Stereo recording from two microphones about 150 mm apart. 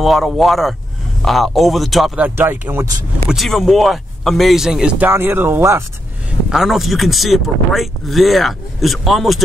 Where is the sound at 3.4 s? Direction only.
Centre (ahead or behind); by 5.8 s 15° right (ahead or behind).